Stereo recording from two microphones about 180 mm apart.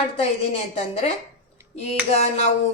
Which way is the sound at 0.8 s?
35° left (ahead or behind).